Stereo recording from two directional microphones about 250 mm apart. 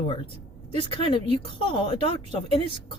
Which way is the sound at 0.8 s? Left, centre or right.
Centre.